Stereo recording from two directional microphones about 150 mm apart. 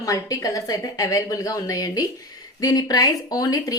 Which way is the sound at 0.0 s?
25° left (ahead or behind).